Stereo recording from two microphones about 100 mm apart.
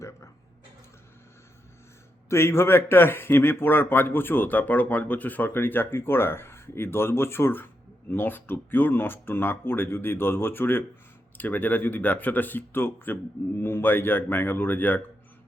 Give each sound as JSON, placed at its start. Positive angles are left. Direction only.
{"t": 2.3, "sound": "a man's voice", "side_deg": 25}